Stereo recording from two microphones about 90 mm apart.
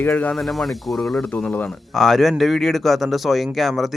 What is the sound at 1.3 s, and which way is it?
Speech, 15° left (ahead or behind).